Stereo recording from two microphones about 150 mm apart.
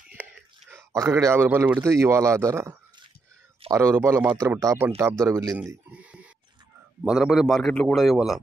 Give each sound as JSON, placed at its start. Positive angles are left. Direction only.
{"t": 0.1, "sound": "speech", "side_deg": -15}
{"t": 5.9, "sound": "a sound", "side_deg": -10}
{"t": 7.1, "sound": "a man's voice", "side_deg": -5}